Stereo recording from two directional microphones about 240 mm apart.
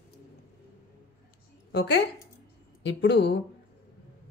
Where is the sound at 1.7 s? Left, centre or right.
Left.